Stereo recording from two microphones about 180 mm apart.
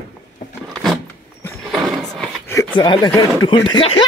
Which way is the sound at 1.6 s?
Centre (ahead or behind).